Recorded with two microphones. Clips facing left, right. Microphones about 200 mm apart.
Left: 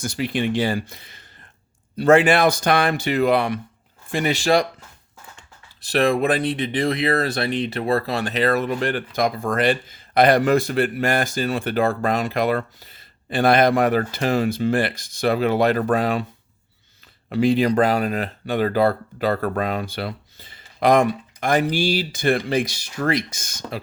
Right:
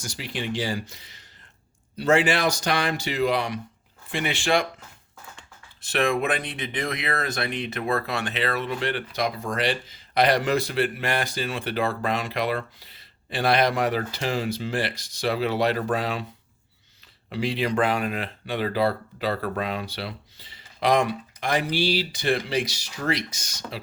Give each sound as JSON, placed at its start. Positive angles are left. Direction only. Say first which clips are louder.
{"t": 0.0, "sound": "speech", "louder": "left 9 dB", "side_deg": 55}
{"t": 4.1, "sound": "speech", "louder": "left 5 dB", "side_deg": 40}
{"t": 5.8, "sound": "speech", "louder": "left 5 dB", "side_deg": 35}
{"t": 17.2, "sound": "speech", "louder": "left 8 dB", "side_deg": 50}